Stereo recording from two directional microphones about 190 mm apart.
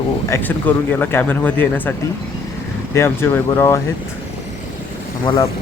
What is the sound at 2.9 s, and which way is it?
Speech, 15° left (ahead or behind).